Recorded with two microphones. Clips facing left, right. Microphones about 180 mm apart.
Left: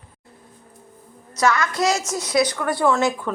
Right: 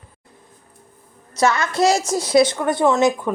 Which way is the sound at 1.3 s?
25° right (ahead or behind).